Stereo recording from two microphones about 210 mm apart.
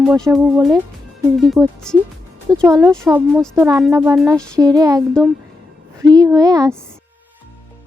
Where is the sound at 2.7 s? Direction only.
15° right (ahead or behind).